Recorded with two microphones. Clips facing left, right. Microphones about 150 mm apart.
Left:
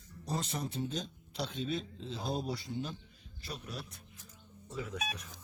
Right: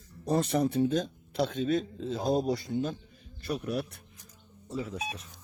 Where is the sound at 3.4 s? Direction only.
65° right (ahead or behind).